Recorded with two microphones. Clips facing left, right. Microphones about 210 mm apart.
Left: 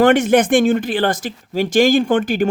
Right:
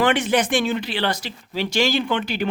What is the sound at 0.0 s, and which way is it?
Speech, 45° left (ahead or behind).